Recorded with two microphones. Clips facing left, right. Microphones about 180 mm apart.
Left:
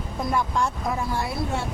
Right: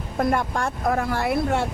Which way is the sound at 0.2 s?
55° right (ahead or behind).